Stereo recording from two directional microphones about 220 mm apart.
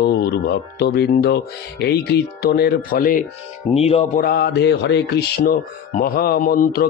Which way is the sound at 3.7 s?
25° left (ahead or behind).